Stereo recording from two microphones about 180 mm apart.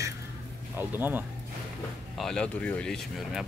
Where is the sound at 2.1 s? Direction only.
5° left (ahead or behind).